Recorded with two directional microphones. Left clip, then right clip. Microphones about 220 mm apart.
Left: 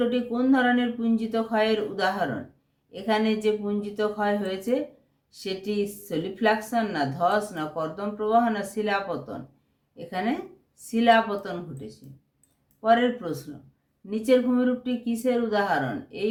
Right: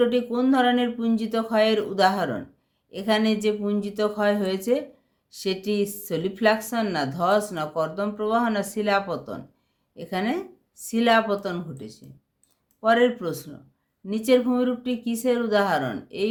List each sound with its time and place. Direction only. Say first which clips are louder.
0.0 s speech: right 3 dB; 50° right (ahead or behind)